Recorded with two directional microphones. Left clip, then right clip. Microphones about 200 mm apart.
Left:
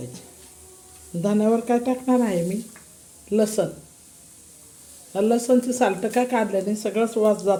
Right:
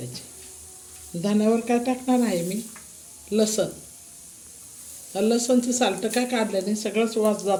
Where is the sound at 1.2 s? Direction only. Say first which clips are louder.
Left 2 dB; 10° left (ahead or behind).